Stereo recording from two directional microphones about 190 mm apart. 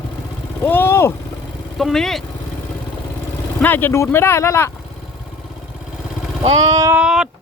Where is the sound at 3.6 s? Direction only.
10° left (ahead or behind).